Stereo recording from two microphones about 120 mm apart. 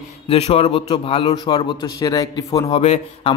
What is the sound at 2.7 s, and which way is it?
Speech, 55° left (ahead or behind).